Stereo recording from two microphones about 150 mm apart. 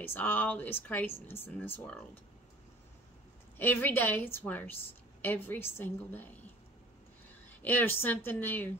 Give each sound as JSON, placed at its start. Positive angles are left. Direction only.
{"t": 0.0, "sound": "a woman's voice", "side_deg": 15}
{"t": 3.5, "sound": "a woman's voice", "side_deg": 15}
{"t": 7.6, "sound": "a woman's voice", "side_deg": 15}